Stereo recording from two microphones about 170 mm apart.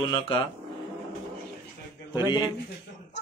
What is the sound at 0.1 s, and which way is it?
Speech, 30° left (ahead or behind).